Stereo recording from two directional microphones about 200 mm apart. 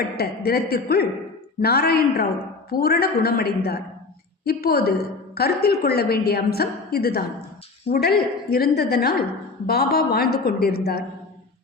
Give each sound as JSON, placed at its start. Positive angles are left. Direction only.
{"t": 0.2, "sound": "a woman's voice", "side_deg": 50}